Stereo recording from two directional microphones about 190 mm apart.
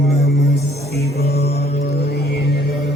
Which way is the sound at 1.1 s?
55° left (ahead or behind).